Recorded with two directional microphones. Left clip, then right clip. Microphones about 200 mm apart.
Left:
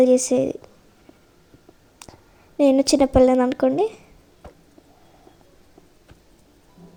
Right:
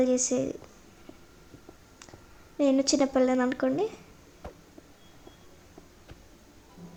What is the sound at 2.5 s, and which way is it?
A woman's voice, 35° left (ahead or behind).